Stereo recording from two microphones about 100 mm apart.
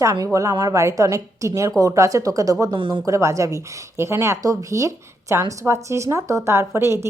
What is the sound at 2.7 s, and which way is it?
Speech, 50° right (ahead or behind).